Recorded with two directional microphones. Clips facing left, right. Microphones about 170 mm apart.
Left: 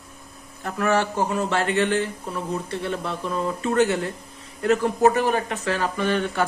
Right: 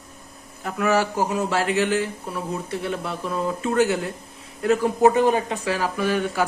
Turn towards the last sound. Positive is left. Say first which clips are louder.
# even
turn(degrees=-5)  # may be behind; listen again after turning